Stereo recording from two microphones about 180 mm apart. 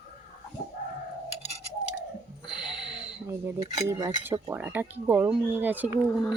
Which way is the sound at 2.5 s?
Centre (ahead or behind).